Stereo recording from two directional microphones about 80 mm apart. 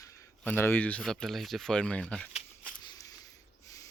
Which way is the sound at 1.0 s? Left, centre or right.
Centre.